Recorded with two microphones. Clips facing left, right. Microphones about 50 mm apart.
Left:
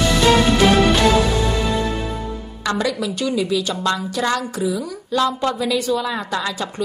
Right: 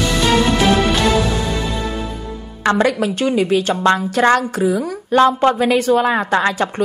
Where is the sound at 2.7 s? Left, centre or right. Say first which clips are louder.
Right 6 dB; right.